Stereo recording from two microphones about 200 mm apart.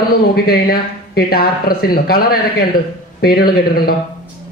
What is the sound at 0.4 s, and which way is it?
A man's voice, 50° left (ahead or behind).